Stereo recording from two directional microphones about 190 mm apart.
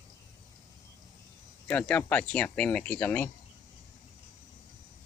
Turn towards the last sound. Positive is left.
turn(degrees=10)  # may be behind; listen again after turning